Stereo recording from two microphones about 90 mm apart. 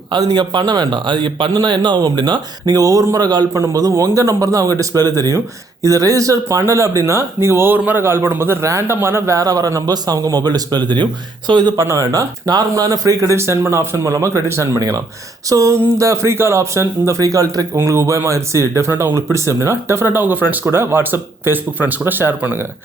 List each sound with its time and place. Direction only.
0.1 s a man's voice: 55° right (ahead or behind)
3.5 s a man's voice: 40° right (ahead or behind); by 11.7 s 60° right (ahead or behind)
11.8 s a man's voice: 40° right (ahead or behind)